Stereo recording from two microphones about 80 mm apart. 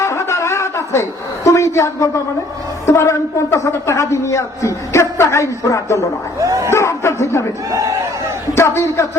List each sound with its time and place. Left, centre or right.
0.0 s a sound: left
1.5 s a man's voice: left
6.4 s speech: right
6.7 s a man's voice: left
7.7 s speech: right
8.5 s a man's voice: left